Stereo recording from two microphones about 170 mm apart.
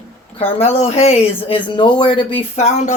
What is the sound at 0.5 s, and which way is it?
Speech, 40° left (ahead or behind).